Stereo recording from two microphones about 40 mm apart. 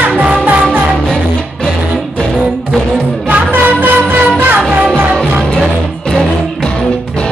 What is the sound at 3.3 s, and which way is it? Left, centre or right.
Music, right.